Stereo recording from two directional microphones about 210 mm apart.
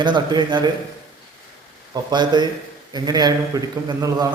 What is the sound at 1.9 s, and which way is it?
A man's voice, 20° right (ahead or behind).